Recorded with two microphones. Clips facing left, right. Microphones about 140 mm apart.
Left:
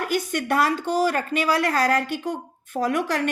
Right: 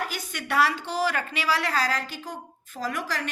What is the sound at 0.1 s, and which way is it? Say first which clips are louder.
Speech: left 7 dB; 55° left (ahead or behind).